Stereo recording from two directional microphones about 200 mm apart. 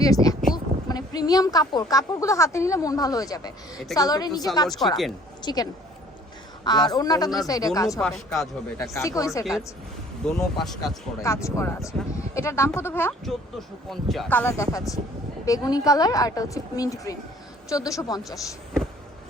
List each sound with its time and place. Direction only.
0.0 s a man's voice: 20° left (ahead or behind)
6.7 s a man's voice: 20° left (ahead or behind)
8.0 s speech: centre (ahead or behind)
8.8 s speech: 15° left (ahead or behind)
10.2 s speech: centre (ahead or behind)
11.2 s speech: 15° left (ahead or behind)